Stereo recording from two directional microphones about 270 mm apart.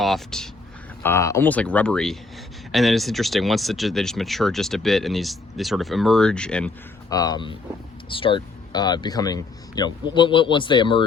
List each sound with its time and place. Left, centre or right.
0.0 s speech: centre
7.1 s speech: centre